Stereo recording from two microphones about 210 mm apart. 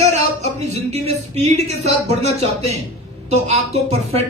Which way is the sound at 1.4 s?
30° right (ahead or behind).